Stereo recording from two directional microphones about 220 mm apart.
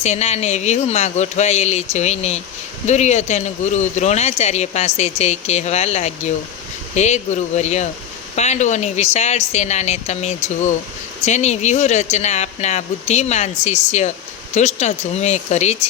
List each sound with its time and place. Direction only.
0.0 s speech: 30° left (ahead or behind)